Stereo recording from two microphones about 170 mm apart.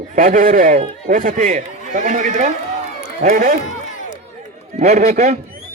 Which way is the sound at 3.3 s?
60° right (ahead or behind).